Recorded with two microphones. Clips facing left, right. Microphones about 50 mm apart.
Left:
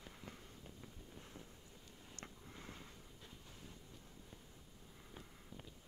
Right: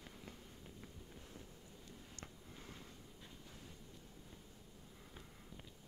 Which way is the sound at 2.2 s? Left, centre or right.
Centre.